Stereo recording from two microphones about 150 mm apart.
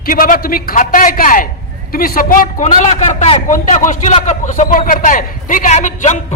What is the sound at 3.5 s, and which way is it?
A man's voice, 55° left (ahead or behind).